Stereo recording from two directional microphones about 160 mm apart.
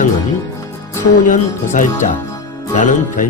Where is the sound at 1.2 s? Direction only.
55° left (ahead or behind).